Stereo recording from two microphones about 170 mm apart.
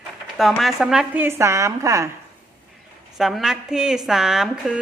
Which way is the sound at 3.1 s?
Centre (ahead or behind).